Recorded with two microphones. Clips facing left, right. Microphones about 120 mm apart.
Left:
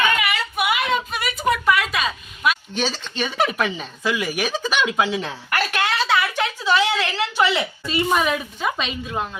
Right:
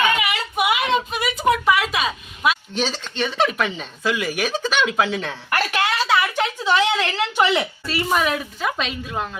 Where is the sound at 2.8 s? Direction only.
10° left (ahead or behind).